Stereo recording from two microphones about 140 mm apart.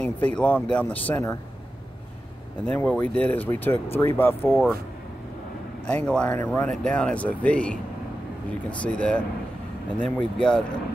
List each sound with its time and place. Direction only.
0.0 s speech: 10° left (ahead or behind)
2.6 s speech: 10° left (ahead or behind)
5.9 s speech: 10° left (ahead or behind)
6.7 s speech: 5° left (ahead or behind)